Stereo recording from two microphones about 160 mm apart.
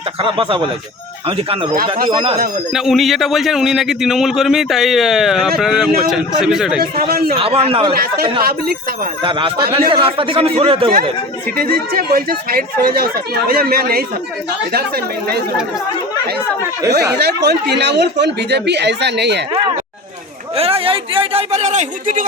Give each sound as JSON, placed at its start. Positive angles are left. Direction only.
{"t": 0.2, "sound": "speech", "side_deg": -35}
{"t": 2.7, "sound": "a man's voice", "side_deg": 0}
{"t": 6.9, "sound": "speech", "side_deg": -70}
{"t": 7.3, "sound": "speech", "side_deg": -35}
{"t": 7.9, "sound": "speech", "side_deg": -70}
{"t": 9.2, "sound": "speech", "side_deg": -30}
{"t": 11.5, "sound": "speech", "side_deg": -70}
{"t": 16.9, "sound": "speech", "side_deg": -90}
{"t": 20.6, "sound": "speech", "side_deg": -35}